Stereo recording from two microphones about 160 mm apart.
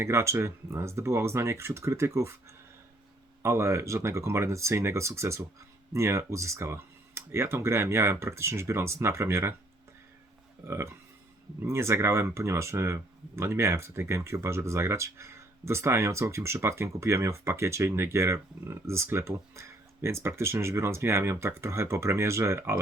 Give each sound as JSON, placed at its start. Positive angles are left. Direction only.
{"t": 0.0, "sound": "speech", "side_deg": -15}
{"t": 3.4, "sound": "speech", "side_deg": -15}
{"t": 10.7, "sound": "speech", "side_deg": -15}